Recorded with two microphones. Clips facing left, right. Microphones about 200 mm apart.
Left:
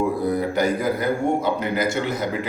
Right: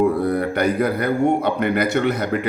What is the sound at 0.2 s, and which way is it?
A man's voice, 60° right (ahead or behind).